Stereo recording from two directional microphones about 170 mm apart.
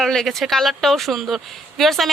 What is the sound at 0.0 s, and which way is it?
Speech, centre (ahead or behind).